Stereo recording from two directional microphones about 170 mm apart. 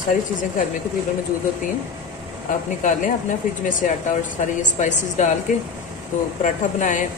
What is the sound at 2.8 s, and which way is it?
Speech, 50° left (ahead or behind).